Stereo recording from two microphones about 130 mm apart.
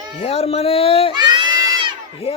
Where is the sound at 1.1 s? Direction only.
35° right (ahead or behind).